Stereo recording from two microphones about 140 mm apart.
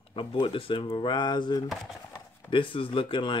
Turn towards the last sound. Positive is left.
turn(degrees=35)  # may be behind; listen again after turning